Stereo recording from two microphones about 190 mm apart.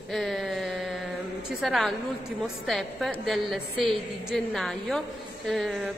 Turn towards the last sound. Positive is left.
turn(degrees=0)  # may be behind; listen again after turning